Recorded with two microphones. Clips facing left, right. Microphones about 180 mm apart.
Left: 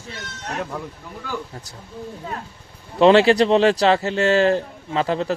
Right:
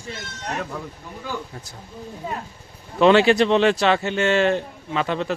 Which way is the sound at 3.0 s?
30° left (ahead or behind).